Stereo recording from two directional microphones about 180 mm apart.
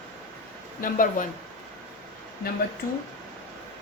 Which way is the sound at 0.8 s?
50° left (ahead or behind).